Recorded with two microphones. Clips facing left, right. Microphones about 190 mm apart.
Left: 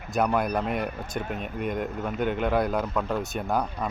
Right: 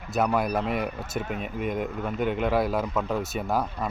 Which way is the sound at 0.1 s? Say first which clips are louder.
Even; 5° right (ahead or behind).